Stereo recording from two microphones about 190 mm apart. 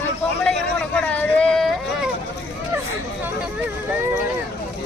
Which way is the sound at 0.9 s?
5° left (ahead or behind).